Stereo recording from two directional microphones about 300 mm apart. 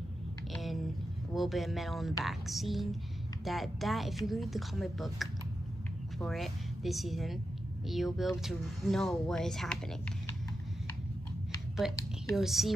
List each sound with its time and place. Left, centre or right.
0.5 s a sound: centre
1.3 s a woman's voice: centre
11.8 s speech: centre